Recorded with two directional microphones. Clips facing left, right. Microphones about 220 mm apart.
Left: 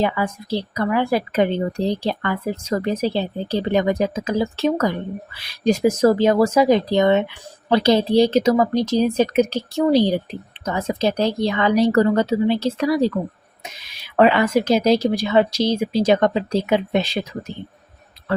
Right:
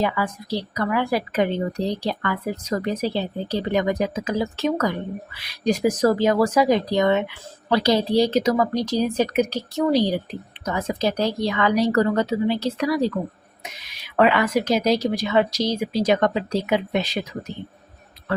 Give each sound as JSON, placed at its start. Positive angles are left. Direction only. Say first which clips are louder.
{"t": 0.0, "sound": "a woman's voice", "louder": "left 2 dB", "side_deg": 25}
{"t": 14.2, "sound": "a woman's voice", "louder": "left 3 dB", "side_deg": 30}